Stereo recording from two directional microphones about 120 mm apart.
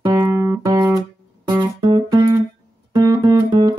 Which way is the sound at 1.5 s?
35° right (ahead or behind).